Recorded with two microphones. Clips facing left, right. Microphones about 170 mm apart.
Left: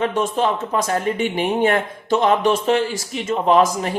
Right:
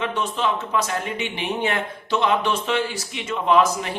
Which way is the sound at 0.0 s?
45° left (ahead or behind).